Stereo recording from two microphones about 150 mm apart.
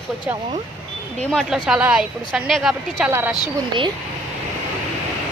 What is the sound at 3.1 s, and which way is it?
Speech, 15° right (ahead or behind).